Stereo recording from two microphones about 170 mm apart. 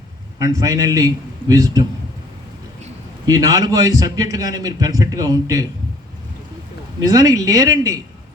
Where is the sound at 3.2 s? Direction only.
20° right (ahead or behind).